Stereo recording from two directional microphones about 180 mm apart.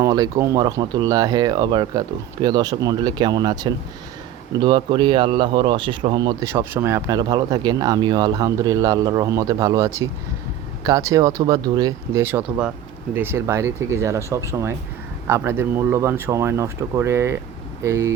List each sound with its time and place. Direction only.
0.0 s speech: 20° right (ahead or behind)